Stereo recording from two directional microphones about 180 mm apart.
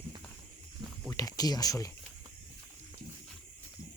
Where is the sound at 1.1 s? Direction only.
20° left (ahead or behind).